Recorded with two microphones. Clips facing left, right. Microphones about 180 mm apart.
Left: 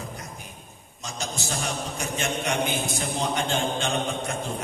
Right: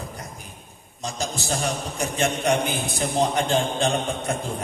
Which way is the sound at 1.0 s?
35° right (ahead or behind).